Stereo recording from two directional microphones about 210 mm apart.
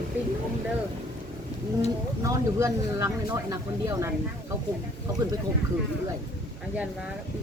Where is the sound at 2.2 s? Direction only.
15° right (ahead or behind).